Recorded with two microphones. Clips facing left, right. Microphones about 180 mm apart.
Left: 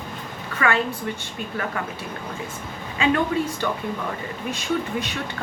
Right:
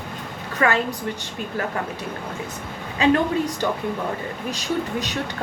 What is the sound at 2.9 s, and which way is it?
Speech, 40° right (ahead or behind).